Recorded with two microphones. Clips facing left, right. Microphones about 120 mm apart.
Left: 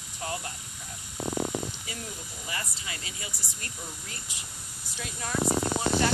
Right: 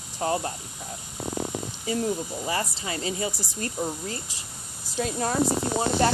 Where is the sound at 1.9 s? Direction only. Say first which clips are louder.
Right 14 dB; 35° right (ahead or behind).